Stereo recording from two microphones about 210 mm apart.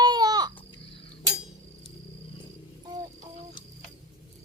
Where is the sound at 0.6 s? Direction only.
25° left (ahead or behind).